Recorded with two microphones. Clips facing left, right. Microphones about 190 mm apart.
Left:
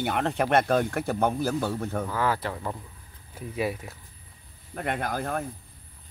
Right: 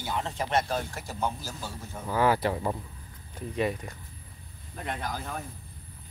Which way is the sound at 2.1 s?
15° right (ahead or behind).